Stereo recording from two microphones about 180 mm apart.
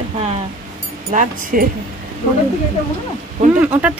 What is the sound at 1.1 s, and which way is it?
Speech, 45° right (ahead or behind).